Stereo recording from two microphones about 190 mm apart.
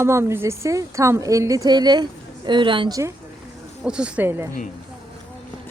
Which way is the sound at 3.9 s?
5° right (ahead or behind).